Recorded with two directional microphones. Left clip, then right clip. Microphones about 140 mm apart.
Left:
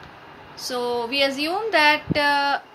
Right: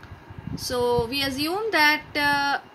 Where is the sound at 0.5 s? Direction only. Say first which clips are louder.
Right 2 dB; 25° right (ahead or behind).